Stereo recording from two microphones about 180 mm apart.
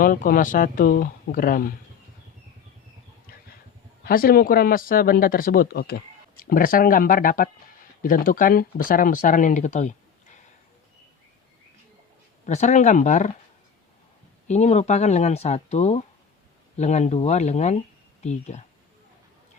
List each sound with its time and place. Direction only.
0.0 s speech: 50° left (ahead or behind)
4.0 s speech: 55° left (ahead or behind)
12.5 s speech: 40° left (ahead or behind)
14.4 s speech: 40° left (ahead or behind)